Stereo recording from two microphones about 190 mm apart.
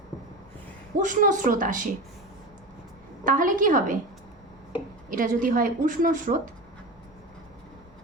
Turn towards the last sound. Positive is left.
turn(degrees=-45)  # may be behind; listen again after turning